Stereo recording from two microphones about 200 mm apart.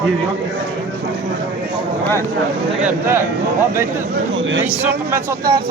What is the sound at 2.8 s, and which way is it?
Speech, 10° right (ahead or behind).